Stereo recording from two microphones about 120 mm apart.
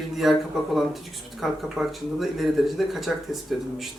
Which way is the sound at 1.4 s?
Centre (ahead or behind).